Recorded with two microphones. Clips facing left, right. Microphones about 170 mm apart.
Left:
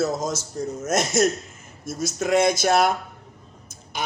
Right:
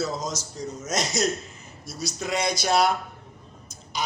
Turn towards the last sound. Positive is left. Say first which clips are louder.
# even
turn(degrees=55)  # may be behind; listen again after turning